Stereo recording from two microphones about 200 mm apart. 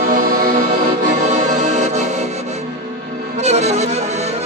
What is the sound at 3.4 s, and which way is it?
Music, 35° right (ahead or behind).